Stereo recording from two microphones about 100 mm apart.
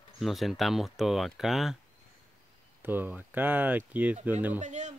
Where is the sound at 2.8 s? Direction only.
20° right (ahead or behind).